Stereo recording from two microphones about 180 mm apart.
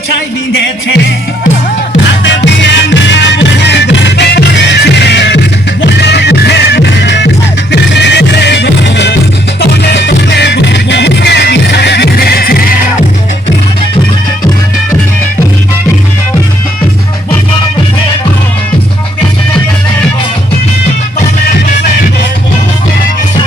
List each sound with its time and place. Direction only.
0.5 s music: 70° left (ahead or behind)
2.2 s music: 80° left; by 13.1 s 55° left (ahead or behind)